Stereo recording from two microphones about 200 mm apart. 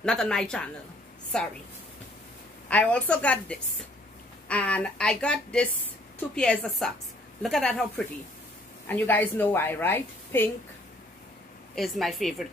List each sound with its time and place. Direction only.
0.0 s a woman's voice: 5° left (ahead or behind)
2.7 s a woman's voice: 5° left (ahead or behind)
8.8 s a woman's voice: 10° left (ahead or behind)
11.7 s a woman's voice: centre (ahead or behind)